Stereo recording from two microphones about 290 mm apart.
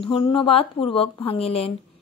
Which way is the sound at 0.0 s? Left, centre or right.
Centre.